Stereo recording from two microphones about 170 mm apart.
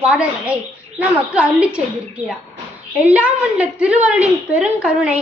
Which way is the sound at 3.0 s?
10° right (ahead or behind).